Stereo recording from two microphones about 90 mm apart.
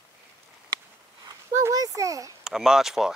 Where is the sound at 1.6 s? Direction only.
40° right (ahead or behind).